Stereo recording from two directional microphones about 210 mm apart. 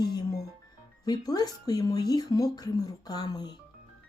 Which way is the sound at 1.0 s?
20° left (ahead or behind).